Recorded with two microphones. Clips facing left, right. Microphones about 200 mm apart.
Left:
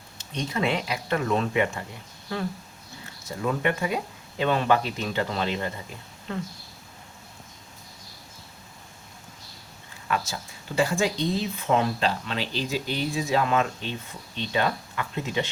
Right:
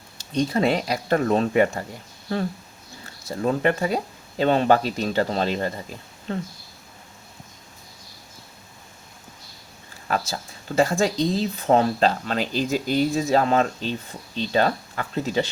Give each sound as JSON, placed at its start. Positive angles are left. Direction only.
{"t": 0.2, "sound": "speech", "side_deg": -35}
{"t": 3.2, "sound": "speech", "side_deg": -35}
{"t": 10.1, "sound": "speech", "side_deg": -35}